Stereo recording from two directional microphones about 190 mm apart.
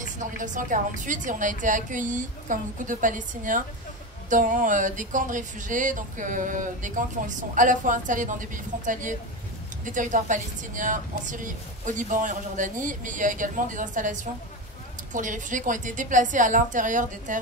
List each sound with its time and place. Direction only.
0.0 s speech: 40° right (ahead or behind)